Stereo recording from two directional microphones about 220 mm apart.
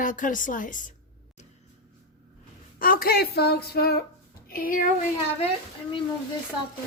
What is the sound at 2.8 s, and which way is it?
Speech, 40° left (ahead or behind).